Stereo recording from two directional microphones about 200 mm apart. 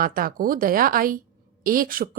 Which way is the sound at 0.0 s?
45° right (ahead or behind).